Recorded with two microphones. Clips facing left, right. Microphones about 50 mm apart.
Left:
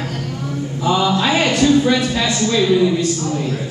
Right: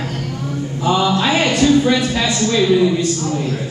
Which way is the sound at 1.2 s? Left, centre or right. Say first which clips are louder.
Even; centre.